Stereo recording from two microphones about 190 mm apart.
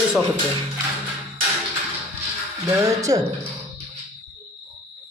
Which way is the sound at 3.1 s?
20° right (ahead or behind).